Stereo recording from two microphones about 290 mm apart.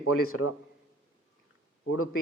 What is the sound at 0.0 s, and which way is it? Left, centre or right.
Speech, left.